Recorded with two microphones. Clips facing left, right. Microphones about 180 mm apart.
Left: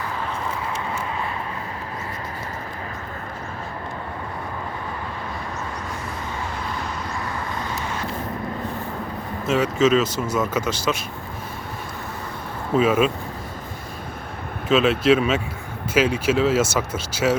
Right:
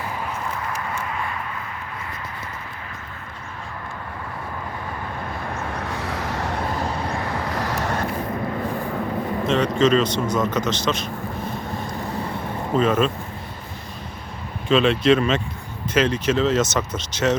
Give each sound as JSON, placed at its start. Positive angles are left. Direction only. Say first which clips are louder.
{"t": 5.8, "sound": "vehicle", "louder": "right 3 dB", "side_deg": -70}
{"t": 9.5, "sound": "speech", "louder": "even", "side_deg": 5}
{"t": 12.7, "sound": "speech", "louder": "left 1 dB", "side_deg": 5}
{"t": 14.7, "sound": "speech", "louder": "even", "side_deg": 5}